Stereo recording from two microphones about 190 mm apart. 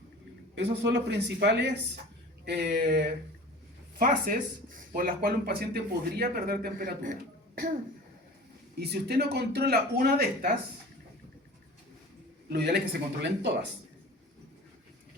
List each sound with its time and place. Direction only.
0.5 s speech: 65° right (ahead or behind); by 7.8 s 45° right (ahead or behind)
8.8 s speech: 60° right (ahead or behind)
12.5 s speech: 60° right (ahead or behind)